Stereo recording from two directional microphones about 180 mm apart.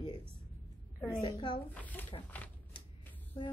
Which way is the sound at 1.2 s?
30° left (ahead or behind).